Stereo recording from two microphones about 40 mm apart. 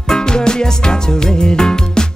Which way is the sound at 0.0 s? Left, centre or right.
Centre.